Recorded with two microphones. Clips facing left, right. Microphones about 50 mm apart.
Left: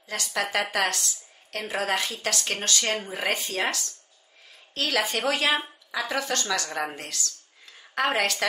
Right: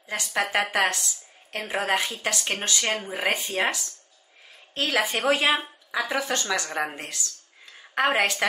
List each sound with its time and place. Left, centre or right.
0.1 s a woman's voice: centre